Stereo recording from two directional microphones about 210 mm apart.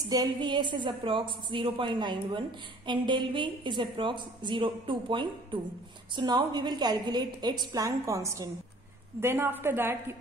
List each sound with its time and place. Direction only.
0.0 s a woman's voice: 20° right (ahead or behind)